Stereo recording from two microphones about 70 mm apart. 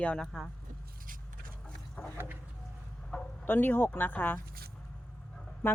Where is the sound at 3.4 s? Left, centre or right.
Left.